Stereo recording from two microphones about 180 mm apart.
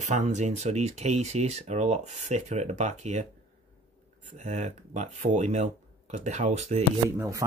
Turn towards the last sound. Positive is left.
turn(degrees=-15)  # may be behind; listen again after turning